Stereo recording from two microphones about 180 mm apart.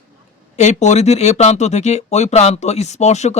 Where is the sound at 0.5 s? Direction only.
40° left (ahead or behind).